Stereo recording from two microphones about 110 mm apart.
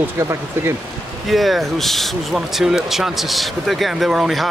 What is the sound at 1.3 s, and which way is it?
Speech, centre (ahead or behind).